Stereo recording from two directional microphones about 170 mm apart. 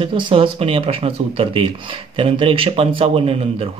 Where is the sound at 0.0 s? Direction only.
30° right (ahead or behind).